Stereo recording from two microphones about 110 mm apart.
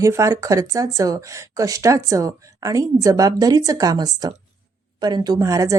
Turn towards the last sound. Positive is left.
turn(degrees=-30)  # may be behind; listen again after turning